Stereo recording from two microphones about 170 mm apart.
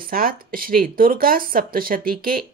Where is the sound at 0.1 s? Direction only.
55° right (ahead or behind).